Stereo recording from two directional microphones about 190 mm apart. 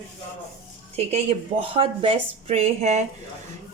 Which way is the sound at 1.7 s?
30° right (ahead or behind).